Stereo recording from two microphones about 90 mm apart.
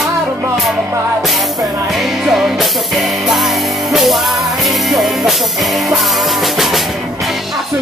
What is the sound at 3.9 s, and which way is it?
Music, centre (ahead or behind).